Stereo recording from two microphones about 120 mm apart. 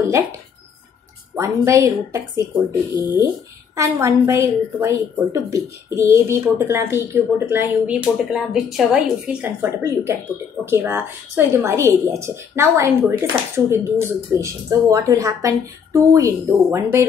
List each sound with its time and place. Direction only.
1.3 s a woman's voice: 25° right (ahead or behind)
3.7 s a woman's voice: 25° right (ahead or behind)